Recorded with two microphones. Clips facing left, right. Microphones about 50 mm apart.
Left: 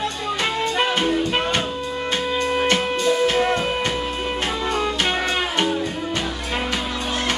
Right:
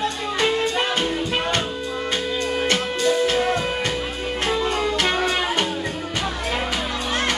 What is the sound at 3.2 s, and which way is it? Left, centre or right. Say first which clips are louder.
Music: left 1 dB; left.